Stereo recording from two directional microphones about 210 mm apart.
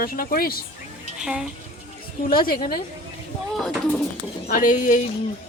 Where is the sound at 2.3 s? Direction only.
45° left (ahead or behind).